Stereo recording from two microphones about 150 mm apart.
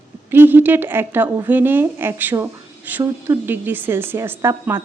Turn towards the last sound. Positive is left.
turn(degrees=-15)  # may be behind; listen again after turning